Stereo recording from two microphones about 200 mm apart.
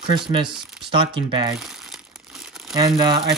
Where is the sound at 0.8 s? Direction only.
25° right (ahead or behind).